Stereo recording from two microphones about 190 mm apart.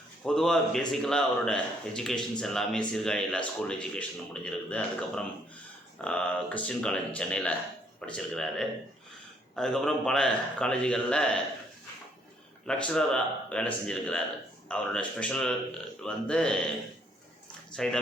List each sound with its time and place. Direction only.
0.3 s speech: centre (ahead or behind)
12.6 s speech: 5° left (ahead or behind)
17.8 s speech: centre (ahead or behind)